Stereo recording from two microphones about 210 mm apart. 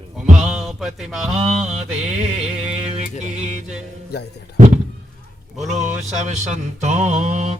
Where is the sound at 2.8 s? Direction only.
30° right (ahead or behind).